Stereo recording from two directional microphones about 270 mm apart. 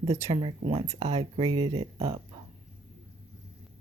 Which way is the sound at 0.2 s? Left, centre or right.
Centre.